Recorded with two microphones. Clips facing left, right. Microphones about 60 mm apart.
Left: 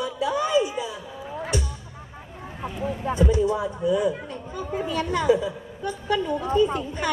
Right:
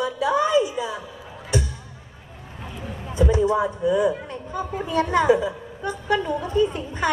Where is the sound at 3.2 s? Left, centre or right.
Right.